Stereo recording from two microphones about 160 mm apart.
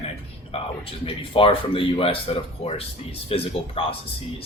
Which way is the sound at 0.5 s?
40° left (ahead or behind).